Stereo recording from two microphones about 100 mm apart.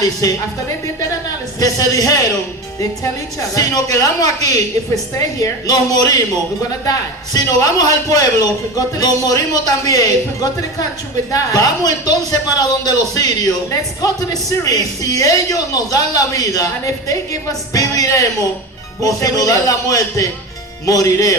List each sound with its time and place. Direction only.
0.0 s a man's voice: 35° left (ahead or behind)
1.5 s a man's voice: 35° left (ahead or behind)
3.5 s a man's voice: 35° left (ahead or behind)
11.3 s a man's voice: 40° left (ahead or behind)